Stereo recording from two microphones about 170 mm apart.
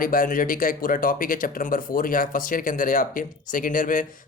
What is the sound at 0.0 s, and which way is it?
Speech, 55° left (ahead or behind).